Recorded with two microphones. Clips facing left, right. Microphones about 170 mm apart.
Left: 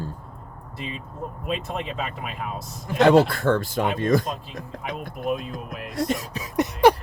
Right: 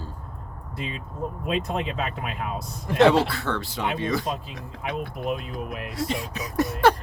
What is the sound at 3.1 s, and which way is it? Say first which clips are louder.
Speech: left 4 dB; 50° left (ahead or behind).